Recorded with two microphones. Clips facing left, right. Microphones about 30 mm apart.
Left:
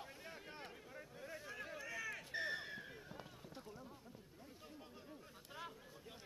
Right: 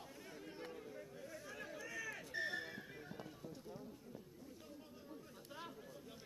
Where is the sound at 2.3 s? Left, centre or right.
Centre.